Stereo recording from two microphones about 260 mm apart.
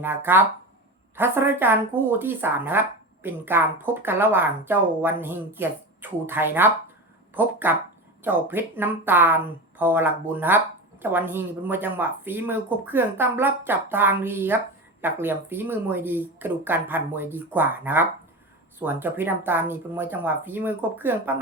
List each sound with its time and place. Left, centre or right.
0.0 s speech: centre